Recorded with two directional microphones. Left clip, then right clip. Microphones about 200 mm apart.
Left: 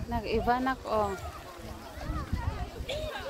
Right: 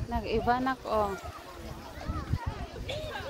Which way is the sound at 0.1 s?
5° right (ahead or behind).